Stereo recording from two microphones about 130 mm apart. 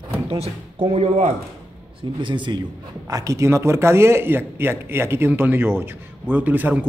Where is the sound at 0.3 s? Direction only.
45° right (ahead or behind).